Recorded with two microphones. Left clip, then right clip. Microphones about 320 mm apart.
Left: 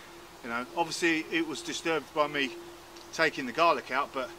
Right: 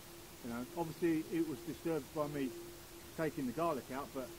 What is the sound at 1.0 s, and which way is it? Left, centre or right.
Speech, centre.